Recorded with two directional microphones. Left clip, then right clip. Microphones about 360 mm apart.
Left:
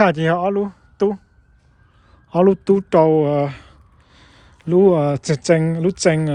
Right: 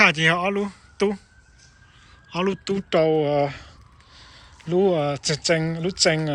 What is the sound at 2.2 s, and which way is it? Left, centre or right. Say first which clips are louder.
Speech: left 10 dB; centre.